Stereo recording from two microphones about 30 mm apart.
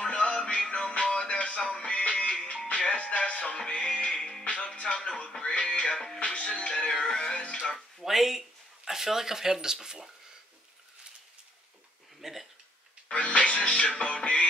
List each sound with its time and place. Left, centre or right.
0.0 s music: left
1.3 s music: left
4.2 s music: centre
4.5 s music: left
7.0 s music: centre
7.3 s music: left
8.0 s speech: centre
12.2 s a sound: centre
13.1 s music: left